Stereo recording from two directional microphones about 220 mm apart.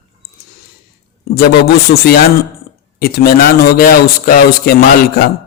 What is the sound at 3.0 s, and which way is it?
A man's voice, 45° left (ahead or behind).